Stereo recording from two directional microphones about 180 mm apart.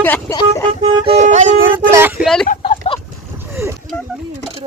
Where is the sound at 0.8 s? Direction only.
35° right (ahead or behind).